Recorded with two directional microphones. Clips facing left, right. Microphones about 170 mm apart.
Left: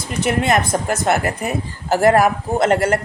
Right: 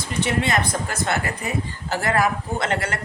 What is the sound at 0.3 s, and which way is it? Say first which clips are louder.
A woman's voice: left 7 dB; 50° left (ahead or behind).